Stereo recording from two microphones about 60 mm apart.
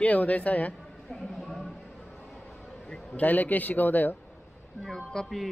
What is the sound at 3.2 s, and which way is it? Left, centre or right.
Speech, left.